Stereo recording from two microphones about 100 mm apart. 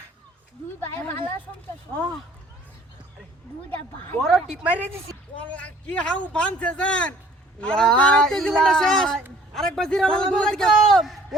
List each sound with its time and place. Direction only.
0.8 s a sound: 20° left (ahead or behind)
4.2 s a man's voice: centre (ahead or behind)
4.6 s a woman's voice: 15° right (ahead or behind)
5.4 s a man's voice: 15° left (ahead or behind)